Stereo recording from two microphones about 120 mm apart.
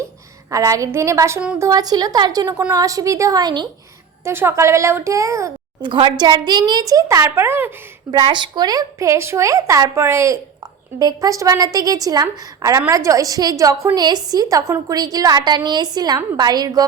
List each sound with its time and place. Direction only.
0.5 s a woman's voice: 25° right (ahead or behind)
4.2 s a woman's voice: 20° right (ahead or behind)
5.8 s a woman's voice: 40° right (ahead or behind); by 7.7 s 20° right (ahead or behind)
8.3 s a woman's voice: 40° right (ahead or behind)